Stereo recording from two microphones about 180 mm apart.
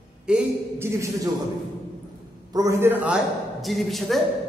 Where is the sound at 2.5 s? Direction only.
15° right (ahead or behind); by 4.2 s centre (ahead or behind).